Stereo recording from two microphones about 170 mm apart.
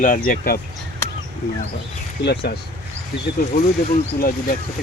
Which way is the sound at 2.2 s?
70° left (ahead or behind).